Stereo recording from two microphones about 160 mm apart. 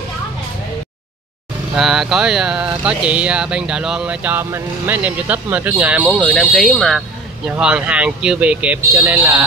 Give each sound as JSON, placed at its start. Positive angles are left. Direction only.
{"t": 1.8, "sound": "speech", "side_deg": -5}